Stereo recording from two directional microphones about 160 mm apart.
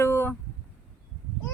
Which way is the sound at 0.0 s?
15° left (ahead or behind).